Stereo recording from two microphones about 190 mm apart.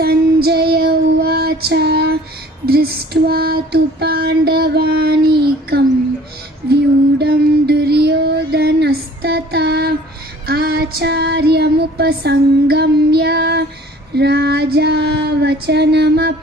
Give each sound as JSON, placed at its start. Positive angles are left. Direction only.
{"t": 0.0, "sound": "child singing", "side_deg": -55}
{"t": 2.6, "sound": "female singing", "side_deg": -55}
{"t": 6.7, "sound": "a sound", "side_deg": -60}
{"t": 10.4, "sound": "female singing", "side_deg": -50}